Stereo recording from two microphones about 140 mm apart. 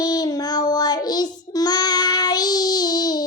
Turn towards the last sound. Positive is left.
turn(degrees=30)  # may be behind; listen again after turning